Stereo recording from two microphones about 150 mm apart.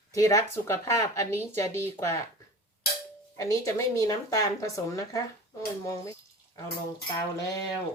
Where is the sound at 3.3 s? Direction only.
20° left (ahead or behind).